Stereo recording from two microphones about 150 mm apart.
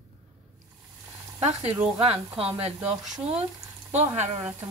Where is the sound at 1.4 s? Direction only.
45° right (ahead or behind).